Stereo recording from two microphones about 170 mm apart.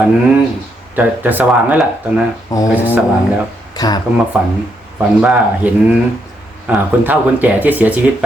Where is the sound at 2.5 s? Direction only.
15° left (ahead or behind).